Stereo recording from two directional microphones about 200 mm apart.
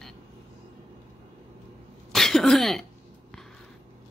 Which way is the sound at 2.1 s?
Centre (ahead or behind).